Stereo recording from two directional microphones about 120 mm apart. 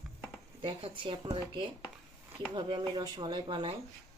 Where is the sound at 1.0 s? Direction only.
45° right (ahead or behind).